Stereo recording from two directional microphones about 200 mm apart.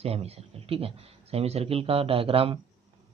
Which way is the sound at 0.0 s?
30° right (ahead or behind).